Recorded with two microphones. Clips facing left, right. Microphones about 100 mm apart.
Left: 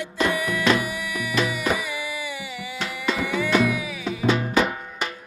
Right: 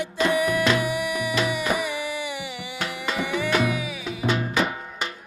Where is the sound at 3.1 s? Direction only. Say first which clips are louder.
Right 1 dB; 25° right (ahead or behind).